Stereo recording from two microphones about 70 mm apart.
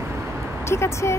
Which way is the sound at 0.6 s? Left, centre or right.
Left.